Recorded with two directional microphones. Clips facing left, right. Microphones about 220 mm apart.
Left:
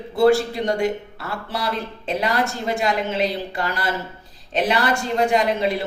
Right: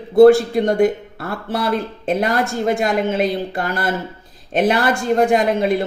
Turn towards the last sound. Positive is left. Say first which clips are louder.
# right 4 dB
turn(degrees=-50)  # may be behind; listen again after turning